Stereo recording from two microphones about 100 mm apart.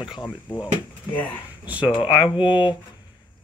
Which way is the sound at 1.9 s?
55° left (ahead or behind).